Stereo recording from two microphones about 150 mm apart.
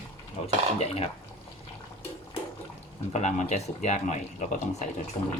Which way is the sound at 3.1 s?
50° left (ahead or behind).